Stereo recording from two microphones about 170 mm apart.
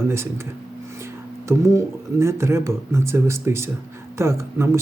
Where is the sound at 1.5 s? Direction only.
15° right (ahead or behind).